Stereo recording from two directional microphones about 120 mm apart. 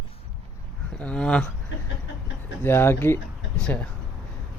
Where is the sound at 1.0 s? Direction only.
10° left (ahead or behind).